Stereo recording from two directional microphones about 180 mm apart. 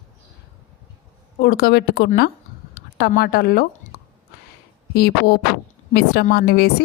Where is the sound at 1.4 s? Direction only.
60° left (ahead or behind).